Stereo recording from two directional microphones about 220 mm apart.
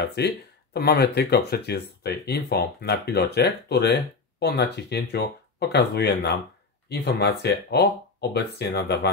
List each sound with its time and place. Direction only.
0.0 s speech: 50° left (ahead or behind)